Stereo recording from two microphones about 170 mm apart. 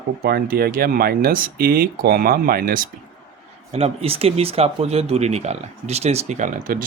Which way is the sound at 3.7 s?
40° right (ahead or behind).